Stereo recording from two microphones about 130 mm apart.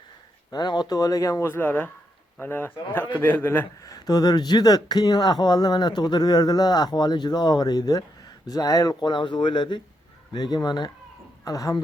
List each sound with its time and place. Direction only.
0.5 s a man's voice: 35° left (ahead or behind); by 3.7 s 15° left (ahead or behind)
3.8 s speech: 30° left (ahead or behind)